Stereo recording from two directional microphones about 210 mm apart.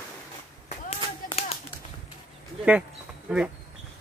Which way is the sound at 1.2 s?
30° left (ahead or behind).